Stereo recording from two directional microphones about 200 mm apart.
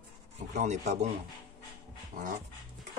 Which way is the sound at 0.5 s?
35° right (ahead or behind).